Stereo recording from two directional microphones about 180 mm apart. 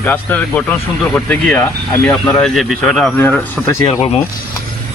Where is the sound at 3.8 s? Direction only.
30° left (ahead or behind).